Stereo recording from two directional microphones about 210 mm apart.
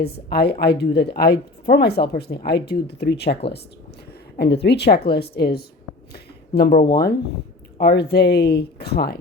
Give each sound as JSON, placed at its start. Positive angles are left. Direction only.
{"t": 0.0, "sound": "speech", "side_deg": 50}
{"t": 6.1, "sound": "a sound", "side_deg": 50}
{"t": 6.9, "sound": "speech", "side_deg": 50}